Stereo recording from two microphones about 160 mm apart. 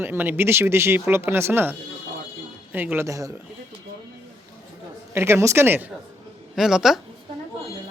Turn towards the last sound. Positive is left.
turn(degrees=0)  # may be behind; listen again after turning